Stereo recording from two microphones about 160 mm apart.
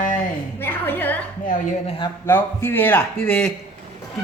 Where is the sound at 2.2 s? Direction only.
15° left (ahead or behind).